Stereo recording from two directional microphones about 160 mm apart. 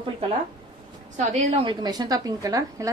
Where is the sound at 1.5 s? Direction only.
30° right (ahead or behind).